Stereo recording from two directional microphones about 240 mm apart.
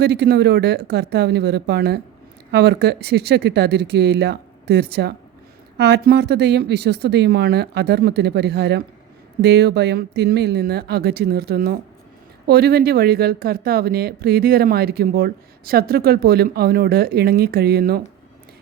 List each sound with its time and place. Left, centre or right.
0.0 s speech: right